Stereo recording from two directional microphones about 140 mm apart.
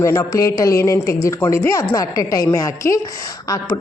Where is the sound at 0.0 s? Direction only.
20° left (ahead or behind).